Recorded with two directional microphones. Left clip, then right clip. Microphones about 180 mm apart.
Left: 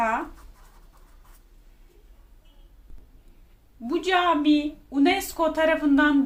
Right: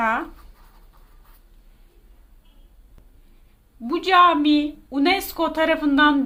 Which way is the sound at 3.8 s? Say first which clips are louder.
Right 7 dB; 25° right (ahead or behind).